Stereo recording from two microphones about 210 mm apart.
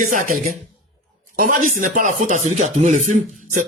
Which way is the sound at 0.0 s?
40° right (ahead or behind).